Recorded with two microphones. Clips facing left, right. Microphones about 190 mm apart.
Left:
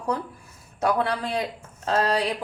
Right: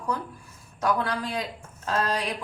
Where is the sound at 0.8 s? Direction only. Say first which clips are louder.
Left 3 dB; 30° left (ahead or behind).